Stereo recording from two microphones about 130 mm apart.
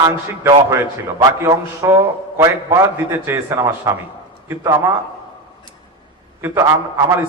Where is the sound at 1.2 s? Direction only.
25° right (ahead or behind).